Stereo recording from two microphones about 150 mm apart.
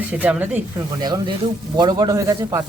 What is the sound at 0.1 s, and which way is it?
Speech, 10° right (ahead or behind).